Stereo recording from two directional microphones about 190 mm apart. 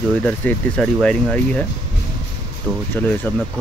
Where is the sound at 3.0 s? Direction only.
10° left (ahead or behind).